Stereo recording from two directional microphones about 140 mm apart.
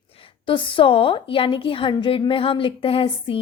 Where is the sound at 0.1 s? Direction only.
40° left (ahead or behind).